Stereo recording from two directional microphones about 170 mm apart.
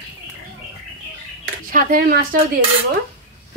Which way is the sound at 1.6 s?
55° right (ahead or behind).